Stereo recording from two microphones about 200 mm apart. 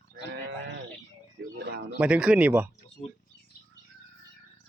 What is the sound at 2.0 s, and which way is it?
Speech, 5° right (ahead or behind).